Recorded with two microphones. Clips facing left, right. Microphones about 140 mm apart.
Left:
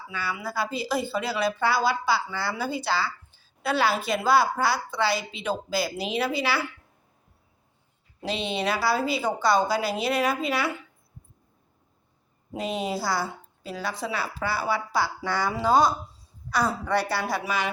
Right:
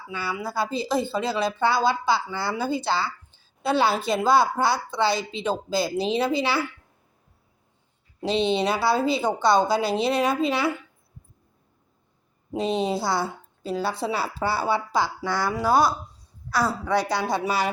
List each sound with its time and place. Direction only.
0.1 s speech: 30° right (ahead or behind)
8.2 s speech: 25° right (ahead or behind)
12.5 s speech: 25° right (ahead or behind)
15.2 s a woman's voice: 10° right (ahead or behind)